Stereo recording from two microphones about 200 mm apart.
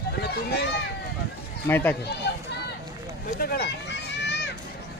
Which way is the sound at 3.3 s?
50° left (ahead or behind).